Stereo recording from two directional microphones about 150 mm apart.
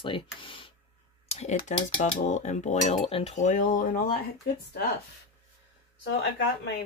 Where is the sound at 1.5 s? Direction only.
60° left (ahead or behind).